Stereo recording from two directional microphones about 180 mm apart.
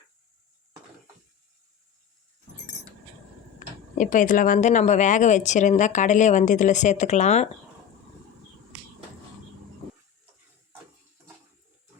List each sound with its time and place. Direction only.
3.9 s speech: 45° left (ahead or behind)